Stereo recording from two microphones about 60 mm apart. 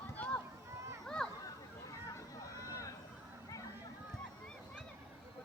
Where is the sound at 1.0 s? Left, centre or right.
Centre.